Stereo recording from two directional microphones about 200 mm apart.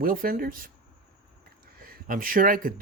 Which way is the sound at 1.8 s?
45° right (ahead or behind).